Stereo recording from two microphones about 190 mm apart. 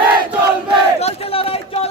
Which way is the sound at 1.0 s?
30° left (ahead or behind).